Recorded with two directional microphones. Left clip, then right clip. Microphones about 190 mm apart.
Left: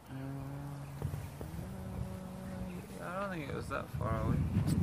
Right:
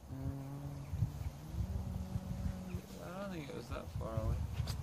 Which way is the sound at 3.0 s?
30° left (ahead or behind).